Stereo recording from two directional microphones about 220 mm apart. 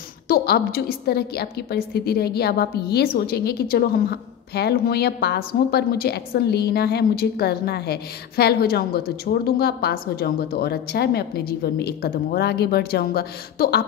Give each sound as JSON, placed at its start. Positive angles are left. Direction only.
{"t": 0.3, "sound": "a woman's voice", "side_deg": 45}